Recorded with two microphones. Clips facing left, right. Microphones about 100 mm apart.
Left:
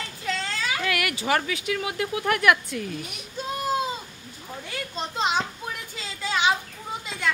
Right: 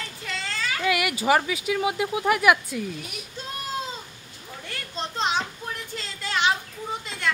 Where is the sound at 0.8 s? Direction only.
15° right (ahead or behind).